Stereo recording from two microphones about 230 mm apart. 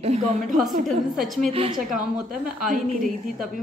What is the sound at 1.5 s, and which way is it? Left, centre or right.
Speech, right.